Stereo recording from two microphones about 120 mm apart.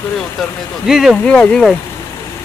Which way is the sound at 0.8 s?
5° right (ahead or behind).